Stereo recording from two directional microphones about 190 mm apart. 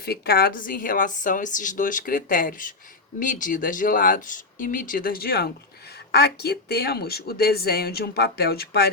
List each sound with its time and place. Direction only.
0.0 s a woman's voice: 55° left (ahead or behind)